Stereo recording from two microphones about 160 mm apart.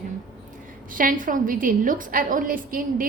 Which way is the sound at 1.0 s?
60° right (ahead or behind).